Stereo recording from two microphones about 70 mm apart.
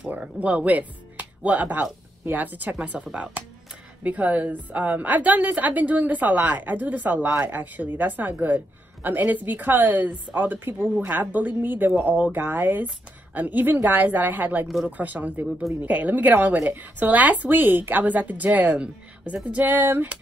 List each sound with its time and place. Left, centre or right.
0.1 s a woman's voice: centre